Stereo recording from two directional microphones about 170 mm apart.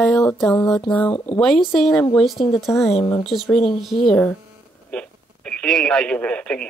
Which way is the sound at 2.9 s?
25° left (ahead or behind).